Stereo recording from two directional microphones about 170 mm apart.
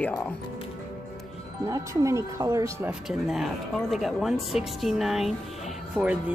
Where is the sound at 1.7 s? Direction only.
20° right (ahead or behind).